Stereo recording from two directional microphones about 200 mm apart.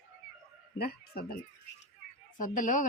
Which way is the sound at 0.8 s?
50° left (ahead or behind).